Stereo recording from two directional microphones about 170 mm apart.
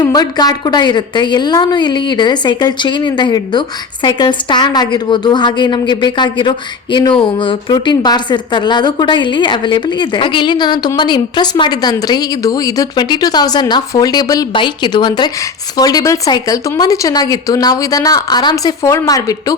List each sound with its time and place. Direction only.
0.0 s a woman's voice: 20° left (ahead or behind)